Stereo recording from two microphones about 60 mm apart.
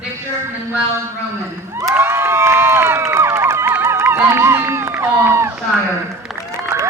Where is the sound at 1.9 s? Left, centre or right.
Right.